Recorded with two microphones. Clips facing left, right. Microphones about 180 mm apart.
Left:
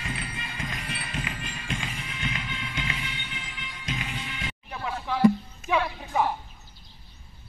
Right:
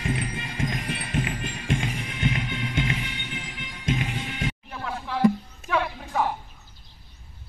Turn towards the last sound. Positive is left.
turn(degrees=5)  # may be behind; listen again after turning